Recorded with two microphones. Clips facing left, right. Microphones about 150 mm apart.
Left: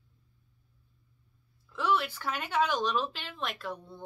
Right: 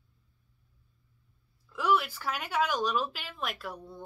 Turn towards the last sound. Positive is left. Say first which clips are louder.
# left 1 dB
turn(degrees=-5)  # may be behind; listen again after turning